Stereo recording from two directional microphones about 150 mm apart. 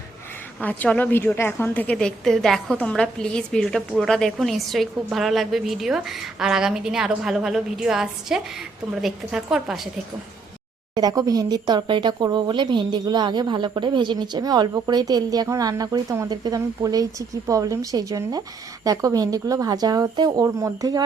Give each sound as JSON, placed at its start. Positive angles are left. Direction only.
{"t": 0.6, "sound": "a woman's voice", "side_deg": 10}
{"t": 10.9, "sound": "speech", "side_deg": -25}